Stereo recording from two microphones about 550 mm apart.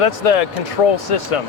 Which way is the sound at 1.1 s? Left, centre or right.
Left.